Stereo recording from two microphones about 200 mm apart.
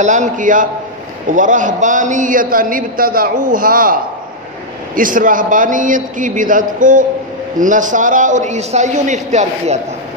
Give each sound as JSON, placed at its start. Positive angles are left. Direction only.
{"t": 0.0, "sound": "a man's voice", "side_deg": -40}